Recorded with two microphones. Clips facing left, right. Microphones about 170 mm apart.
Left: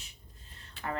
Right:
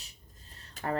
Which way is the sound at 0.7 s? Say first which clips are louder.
Right 4 dB; 40° right (ahead or behind).